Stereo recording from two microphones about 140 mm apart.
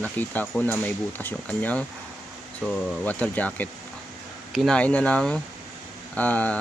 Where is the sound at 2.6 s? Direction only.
5° right (ahead or behind).